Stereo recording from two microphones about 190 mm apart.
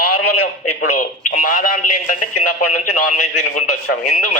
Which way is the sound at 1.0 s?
45° left (ahead or behind).